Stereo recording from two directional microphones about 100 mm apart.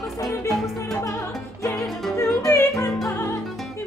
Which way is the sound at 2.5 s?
30° left (ahead or behind).